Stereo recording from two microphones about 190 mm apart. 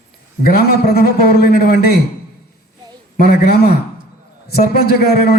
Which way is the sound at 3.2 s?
55° left (ahead or behind).